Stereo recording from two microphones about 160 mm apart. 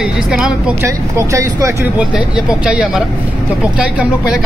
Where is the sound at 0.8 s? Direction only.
20° right (ahead or behind).